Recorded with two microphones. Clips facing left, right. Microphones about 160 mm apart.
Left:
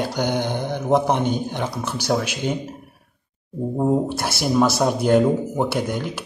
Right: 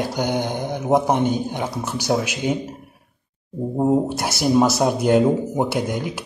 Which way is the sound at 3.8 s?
20° right (ahead or behind).